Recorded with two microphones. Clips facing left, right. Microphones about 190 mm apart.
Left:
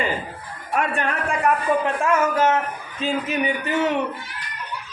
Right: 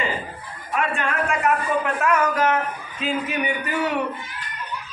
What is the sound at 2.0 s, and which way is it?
A man's voice, 25° left (ahead or behind).